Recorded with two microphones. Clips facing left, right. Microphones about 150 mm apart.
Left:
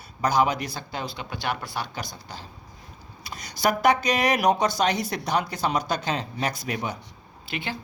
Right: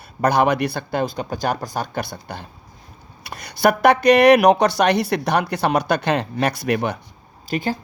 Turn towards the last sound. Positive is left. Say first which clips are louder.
# right 9 dB
turn(degrees=-40)  # may be behind; listen again after turning